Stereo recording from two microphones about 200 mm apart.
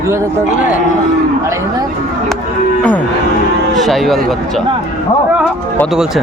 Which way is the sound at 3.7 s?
Centre (ahead or behind).